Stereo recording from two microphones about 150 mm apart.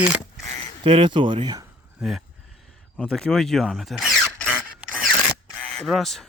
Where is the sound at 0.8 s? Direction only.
35° right (ahead or behind).